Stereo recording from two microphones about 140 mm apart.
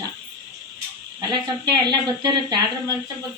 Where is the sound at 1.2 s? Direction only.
30° right (ahead or behind).